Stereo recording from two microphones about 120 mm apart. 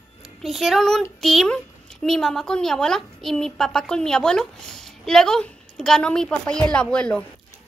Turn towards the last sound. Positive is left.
turn(degrees=5)  # may be behind; listen again after turning